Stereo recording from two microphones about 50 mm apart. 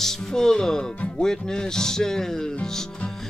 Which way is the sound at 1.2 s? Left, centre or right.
Centre.